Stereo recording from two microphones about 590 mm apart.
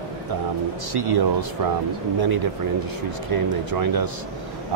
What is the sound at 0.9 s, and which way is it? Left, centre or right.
Speech, right.